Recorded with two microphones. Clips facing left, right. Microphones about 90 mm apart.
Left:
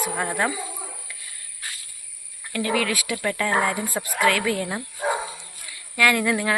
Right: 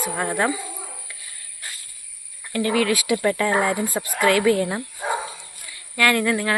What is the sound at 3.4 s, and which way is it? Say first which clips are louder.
Speech: right 2 dB; 5° right (ahead or behind).